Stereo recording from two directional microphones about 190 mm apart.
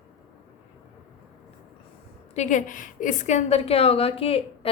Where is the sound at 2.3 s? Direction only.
40° left (ahead or behind).